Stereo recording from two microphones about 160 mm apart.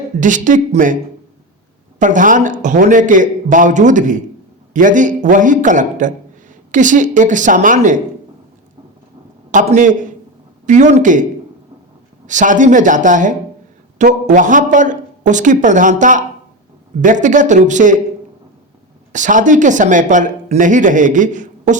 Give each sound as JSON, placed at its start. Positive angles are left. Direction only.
{"t": 0.2, "sound": "speech", "side_deg": -55}
{"t": 2.0, "sound": "speech", "side_deg": -55}
{"t": 9.5, "sound": "speech", "side_deg": -55}
{"t": 19.1, "sound": "speech", "side_deg": -50}